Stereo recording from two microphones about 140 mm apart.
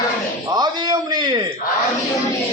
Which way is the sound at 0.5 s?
30° right (ahead or behind).